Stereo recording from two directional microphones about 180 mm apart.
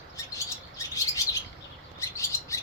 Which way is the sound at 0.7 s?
20° left (ahead or behind).